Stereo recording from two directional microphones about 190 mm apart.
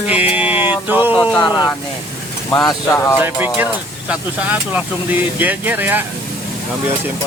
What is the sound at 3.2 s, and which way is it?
Speech, 10° right (ahead or behind).